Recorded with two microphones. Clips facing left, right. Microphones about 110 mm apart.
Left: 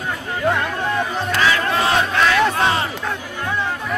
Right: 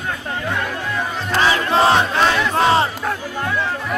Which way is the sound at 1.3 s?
30° right (ahead or behind).